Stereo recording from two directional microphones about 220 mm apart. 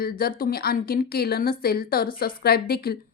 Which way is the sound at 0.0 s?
45° left (ahead or behind).